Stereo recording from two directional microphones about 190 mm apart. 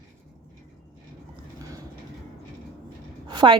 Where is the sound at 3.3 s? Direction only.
25° right (ahead or behind).